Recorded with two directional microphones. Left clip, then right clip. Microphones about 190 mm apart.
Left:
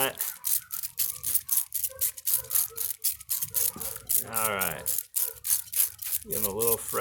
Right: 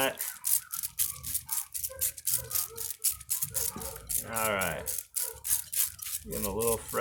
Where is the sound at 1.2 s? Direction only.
45° left (ahead or behind).